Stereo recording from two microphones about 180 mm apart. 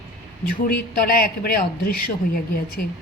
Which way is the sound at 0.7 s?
55° left (ahead or behind).